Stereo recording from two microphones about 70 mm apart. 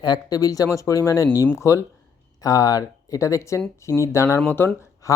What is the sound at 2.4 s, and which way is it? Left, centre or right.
Speech, left.